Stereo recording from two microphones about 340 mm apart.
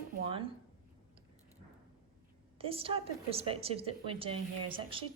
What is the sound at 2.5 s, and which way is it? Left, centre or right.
Speech, centre.